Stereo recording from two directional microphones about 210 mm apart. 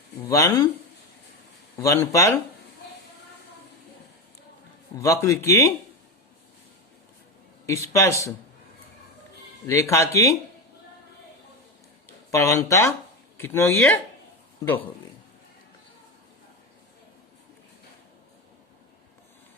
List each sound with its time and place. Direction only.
0.3 s a man's voice: 15° left (ahead or behind)
1.8 s a man's voice: 15° left (ahead or behind)
4.9 s a man's voice: 15° left (ahead or behind)
7.7 s a man's voice: 15° left (ahead or behind)
9.6 s a man's voice: 15° left (ahead or behind)
12.3 s a man's voice: 15° left (ahead or behind)